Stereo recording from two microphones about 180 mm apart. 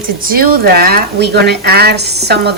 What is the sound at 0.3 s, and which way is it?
Speech, 55° right (ahead or behind).